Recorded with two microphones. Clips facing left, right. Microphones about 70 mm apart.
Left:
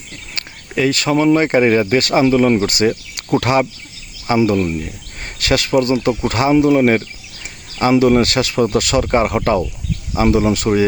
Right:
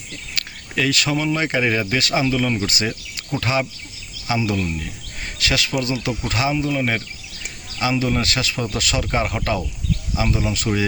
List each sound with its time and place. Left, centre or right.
0.3 s speech: left
3.3 s speech: left
4.3 s speech: left
9.0 s speech: left